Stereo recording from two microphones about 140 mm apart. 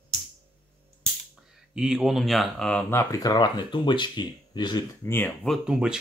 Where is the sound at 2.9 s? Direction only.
25° left (ahead or behind).